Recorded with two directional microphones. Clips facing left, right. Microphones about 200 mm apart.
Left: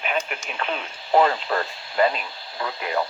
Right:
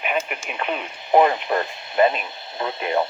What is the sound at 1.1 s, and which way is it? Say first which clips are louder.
Speech: right 2 dB; 20° right (ahead or behind).